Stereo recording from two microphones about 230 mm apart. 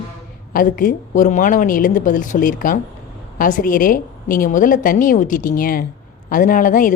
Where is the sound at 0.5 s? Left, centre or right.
Left.